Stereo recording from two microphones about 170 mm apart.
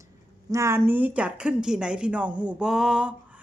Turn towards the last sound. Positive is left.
turn(degrees=-5)  # may be behind; listen again after turning